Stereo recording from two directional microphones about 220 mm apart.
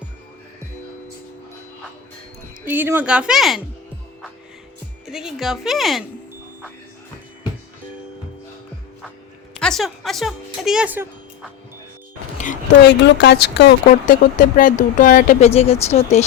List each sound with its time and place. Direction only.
2.6 s speech: 10° right (ahead or behind)
5.0 s speech: centre (ahead or behind)
9.6 s a woman's voice: centre (ahead or behind)
12.8 s speech: 50° left (ahead or behind)
14.1 s speech: 35° left (ahead or behind)